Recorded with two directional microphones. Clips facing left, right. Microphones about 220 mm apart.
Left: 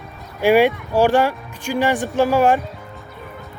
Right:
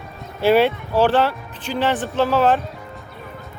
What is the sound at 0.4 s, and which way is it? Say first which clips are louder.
Speech: left 1 dB; 10° left (ahead or behind).